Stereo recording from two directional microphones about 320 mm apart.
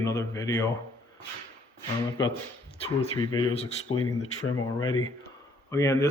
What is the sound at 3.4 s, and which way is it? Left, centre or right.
Speech, left.